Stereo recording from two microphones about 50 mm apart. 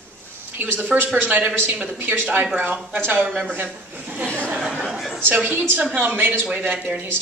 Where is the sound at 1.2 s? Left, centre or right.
Right.